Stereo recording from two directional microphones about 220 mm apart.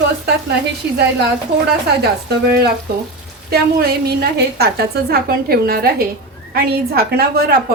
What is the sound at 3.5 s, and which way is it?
A woman's voice, 45° right (ahead or behind).